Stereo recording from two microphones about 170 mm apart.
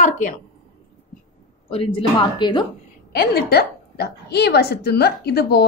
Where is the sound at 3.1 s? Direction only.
65° left (ahead or behind).